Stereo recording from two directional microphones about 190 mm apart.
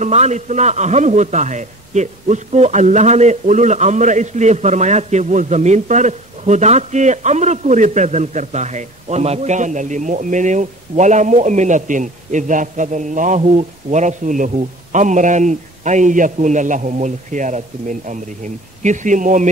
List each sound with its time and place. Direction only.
0.0 s a man's voice: 35° right (ahead or behind)